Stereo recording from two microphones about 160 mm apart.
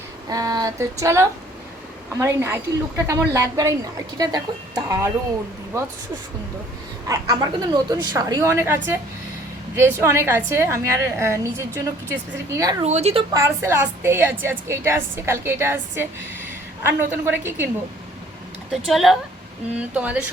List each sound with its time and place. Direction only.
0.3 s a woman's voice: 25° right (ahead or behind)
7.1 s a woman's voice: 25° right (ahead or behind)
12.8 s speech: 40° right (ahead or behind)
13.3 s a woman's voice: 20° right (ahead or behind)
18.7 s a woman's voice: centre (ahead or behind)